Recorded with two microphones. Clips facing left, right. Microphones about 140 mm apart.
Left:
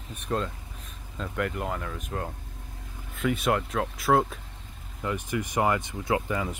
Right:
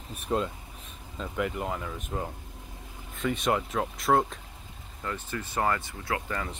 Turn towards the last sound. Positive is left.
turn(degrees=20)  # may be behind; listen again after turning